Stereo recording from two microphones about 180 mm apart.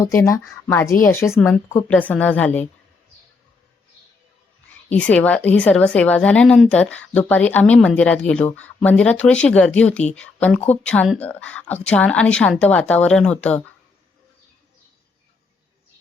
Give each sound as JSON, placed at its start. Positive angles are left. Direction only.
{"t": 0.0, "sound": "a woman's voice", "side_deg": 15}
{"t": 4.9, "sound": "a woman's voice", "side_deg": 10}